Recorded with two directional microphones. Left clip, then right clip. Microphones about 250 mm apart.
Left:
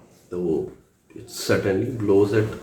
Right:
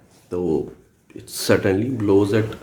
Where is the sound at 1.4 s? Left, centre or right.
Right.